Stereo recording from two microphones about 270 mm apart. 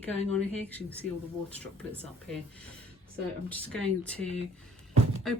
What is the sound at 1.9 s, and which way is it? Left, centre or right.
Speech, centre.